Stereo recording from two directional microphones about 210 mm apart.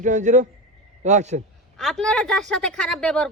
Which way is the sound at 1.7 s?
Centre (ahead or behind).